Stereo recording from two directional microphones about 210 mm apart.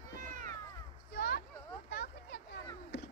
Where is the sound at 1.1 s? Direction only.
50° left (ahead or behind).